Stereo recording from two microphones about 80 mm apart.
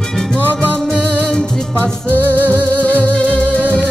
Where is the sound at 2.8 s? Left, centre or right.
Centre.